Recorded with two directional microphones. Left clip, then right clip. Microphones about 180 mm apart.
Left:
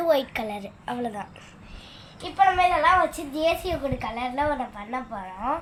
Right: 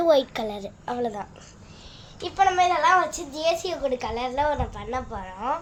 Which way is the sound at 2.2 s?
60° right (ahead or behind).